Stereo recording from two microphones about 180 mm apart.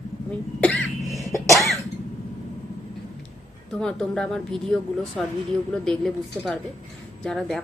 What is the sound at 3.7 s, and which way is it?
A woman's voice, 5° left (ahead or behind).